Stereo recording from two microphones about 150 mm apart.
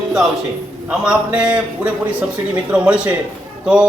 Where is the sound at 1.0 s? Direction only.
5° right (ahead or behind).